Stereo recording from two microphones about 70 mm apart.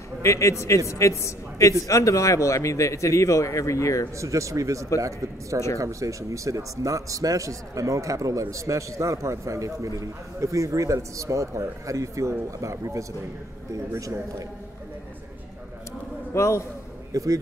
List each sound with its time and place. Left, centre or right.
0.2 s a man's voice: left
4.2 s speech: right
16.3 s a man's voice: left
17.1 s speech: right